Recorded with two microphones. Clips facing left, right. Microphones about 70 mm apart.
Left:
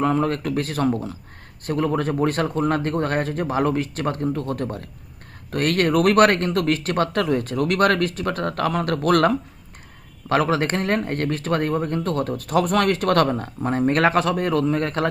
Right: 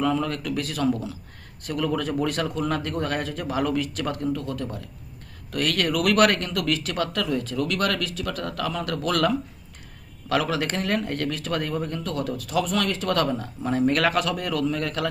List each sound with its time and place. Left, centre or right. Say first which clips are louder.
0.0 s speech: left 4 dB; left